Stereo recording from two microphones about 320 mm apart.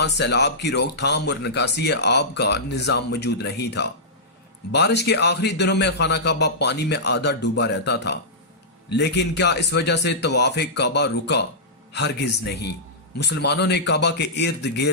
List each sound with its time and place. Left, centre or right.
0.0 s speech: left